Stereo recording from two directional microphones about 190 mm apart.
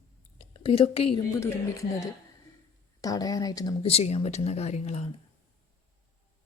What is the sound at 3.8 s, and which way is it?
Speech, 35° left (ahead or behind).